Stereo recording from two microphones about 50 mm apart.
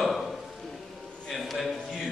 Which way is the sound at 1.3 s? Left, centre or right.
Centre.